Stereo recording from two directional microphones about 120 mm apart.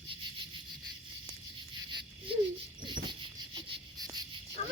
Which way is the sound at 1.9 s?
40° right (ahead or behind).